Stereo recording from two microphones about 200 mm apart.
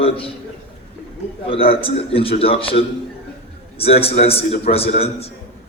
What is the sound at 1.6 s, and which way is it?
A man's voice, 30° left (ahead or behind).